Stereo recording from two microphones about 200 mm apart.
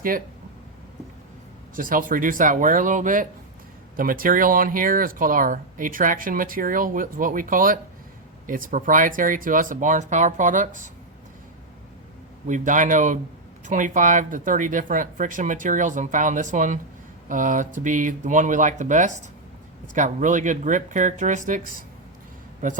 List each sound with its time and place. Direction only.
1.7 s speech: 45° right (ahead or behind)
12.5 s speech: 40° right (ahead or behind)